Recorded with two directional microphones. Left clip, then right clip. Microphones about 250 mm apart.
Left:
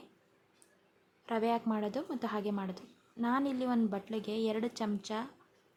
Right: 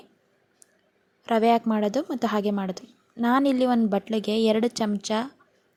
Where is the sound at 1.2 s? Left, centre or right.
Right.